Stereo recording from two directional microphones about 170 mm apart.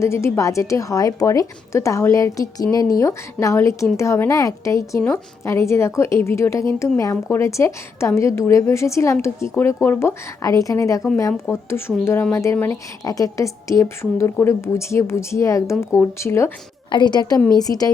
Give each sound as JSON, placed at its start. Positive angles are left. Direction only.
{"t": 0.0, "sound": "speech", "side_deg": 15}
{"t": 16.9, "sound": "a woman's voice", "side_deg": 25}